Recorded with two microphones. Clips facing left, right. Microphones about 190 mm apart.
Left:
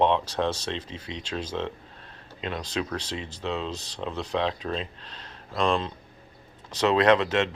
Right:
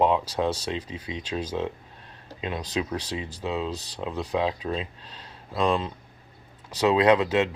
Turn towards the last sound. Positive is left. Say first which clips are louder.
# right 1 dB
turn(degrees=-10)  # may be behind; listen again after turning